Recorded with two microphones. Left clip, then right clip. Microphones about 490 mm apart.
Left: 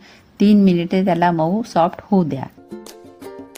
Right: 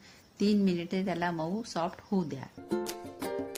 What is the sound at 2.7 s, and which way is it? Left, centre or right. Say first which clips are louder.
Music: right 2 dB; centre.